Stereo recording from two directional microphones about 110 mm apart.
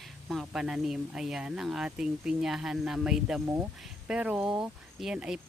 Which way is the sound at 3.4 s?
30° right (ahead or behind).